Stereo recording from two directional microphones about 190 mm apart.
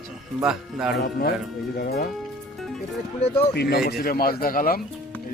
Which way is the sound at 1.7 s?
55° left (ahead or behind).